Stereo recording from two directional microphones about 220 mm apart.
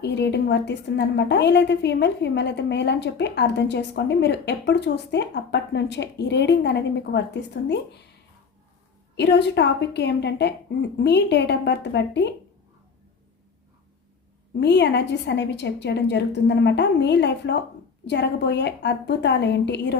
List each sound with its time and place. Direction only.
0.0 s a woman's voice: 50° left (ahead or behind)
9.1 s a woman's voice: 50° left (ahead or behind)
14.6 s a woman's voice: 50° left (ahead or behind)